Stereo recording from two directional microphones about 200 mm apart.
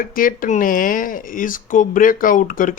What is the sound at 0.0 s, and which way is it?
Speech, 45° left (ahead or behind).